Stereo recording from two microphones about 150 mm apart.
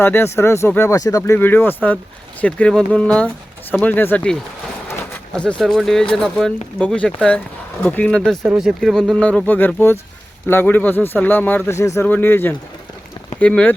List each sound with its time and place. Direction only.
0.0 s speech: 15° left (ahead or behind)